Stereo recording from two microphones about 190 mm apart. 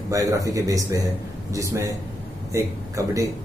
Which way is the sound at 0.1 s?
15° right (ahead or behind).